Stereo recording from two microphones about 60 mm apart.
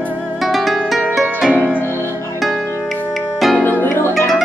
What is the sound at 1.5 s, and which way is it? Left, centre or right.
Music, right.